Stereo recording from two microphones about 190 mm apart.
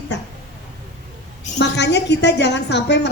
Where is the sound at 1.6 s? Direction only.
65° left (ahead or behind).